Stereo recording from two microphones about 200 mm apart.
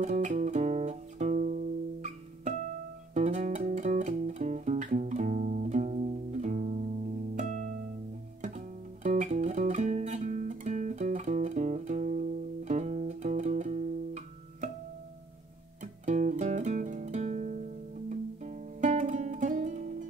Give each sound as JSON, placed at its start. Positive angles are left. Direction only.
{"t": 0.0, "sound": "music", "side_deg": -35}
{"t": 7.3, "sound": "harp", "side_deg": -40}
{"t": 8.4, "sound": "music", "side_deg": -35}
{"t": 15.8, "sound": "music", "side_deg": -35}